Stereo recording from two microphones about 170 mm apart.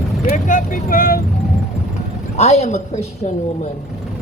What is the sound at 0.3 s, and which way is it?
Vehicle, 50° left (ahead or behind).